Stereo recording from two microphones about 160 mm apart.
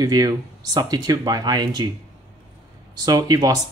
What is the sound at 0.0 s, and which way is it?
Speech, 25° right (ahead or behind).